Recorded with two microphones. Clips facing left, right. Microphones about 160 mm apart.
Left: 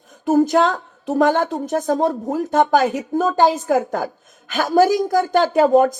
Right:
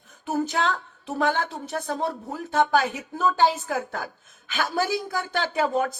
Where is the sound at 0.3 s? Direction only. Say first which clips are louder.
Left 10 dB; 40° left (ahead or behind).